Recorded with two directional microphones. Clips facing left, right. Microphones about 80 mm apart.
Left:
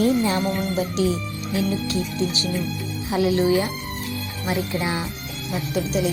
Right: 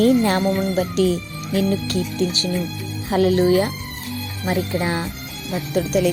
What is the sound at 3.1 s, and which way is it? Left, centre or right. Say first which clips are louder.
Speech: right 4 dB; right.